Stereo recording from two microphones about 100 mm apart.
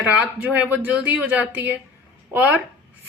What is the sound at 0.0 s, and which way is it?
Speech, 10° right (ahead or behind).